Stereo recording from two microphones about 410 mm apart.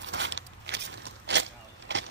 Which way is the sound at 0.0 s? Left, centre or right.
Right.